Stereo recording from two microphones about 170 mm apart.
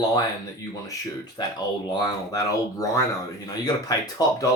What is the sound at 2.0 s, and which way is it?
Speech, 20° left (ahead or behind).